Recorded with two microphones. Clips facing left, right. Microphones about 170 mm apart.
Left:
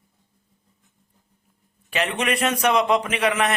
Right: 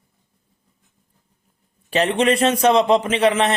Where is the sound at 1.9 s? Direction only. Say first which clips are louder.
Right 7 dB; 30° right (ahead or behind).